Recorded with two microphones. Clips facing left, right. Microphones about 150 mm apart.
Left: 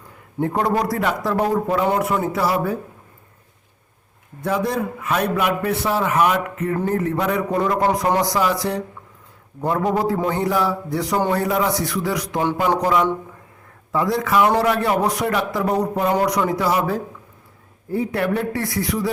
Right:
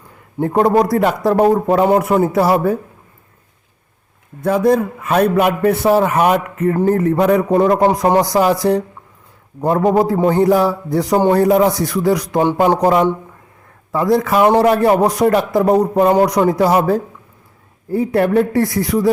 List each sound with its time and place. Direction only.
0.3 s a man's voice: 40° right (ahead or behind)
4.4 s a man's voice: 45° right (ahead or behind)
13.9 s a man's voice: 40° right (ahead or behind)
14.3 s speech: 25° right (ahead or behind)
14.8 s a man's voice: 40° right (ahead or behind)